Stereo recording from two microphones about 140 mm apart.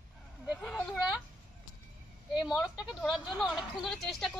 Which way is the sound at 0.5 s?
10° left (ahead or behind).